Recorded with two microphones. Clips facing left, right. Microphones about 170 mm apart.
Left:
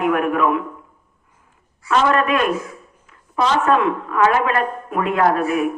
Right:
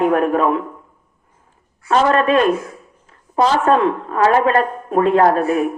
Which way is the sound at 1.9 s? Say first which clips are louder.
Right 3 dB; 35° right (ahead or behind).